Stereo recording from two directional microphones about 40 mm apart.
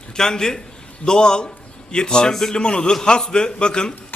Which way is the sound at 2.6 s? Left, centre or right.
Left.